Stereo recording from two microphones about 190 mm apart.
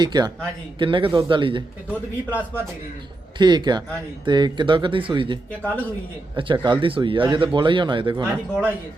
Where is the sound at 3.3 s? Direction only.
25° right (ahead or behind).